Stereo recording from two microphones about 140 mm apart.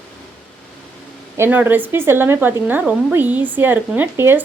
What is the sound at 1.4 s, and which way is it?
Speech, 15° right (ahead or behind).